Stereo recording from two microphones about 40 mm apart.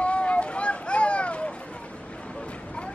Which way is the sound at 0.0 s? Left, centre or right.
Left.